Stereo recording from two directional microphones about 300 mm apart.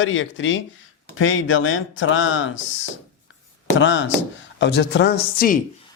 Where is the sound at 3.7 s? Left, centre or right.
Left.